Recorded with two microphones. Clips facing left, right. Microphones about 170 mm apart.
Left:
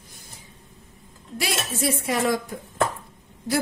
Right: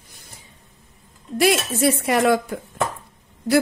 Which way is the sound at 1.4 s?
60° right (ahead or behind).